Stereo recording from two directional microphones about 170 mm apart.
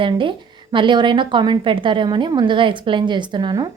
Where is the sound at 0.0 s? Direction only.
30° right (ahead or behind).